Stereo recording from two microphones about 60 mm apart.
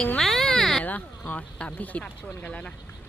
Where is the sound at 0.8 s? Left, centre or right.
Left.